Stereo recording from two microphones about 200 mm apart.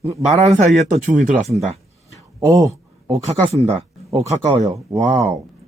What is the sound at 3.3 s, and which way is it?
Speech, 30° right (ahead or behind).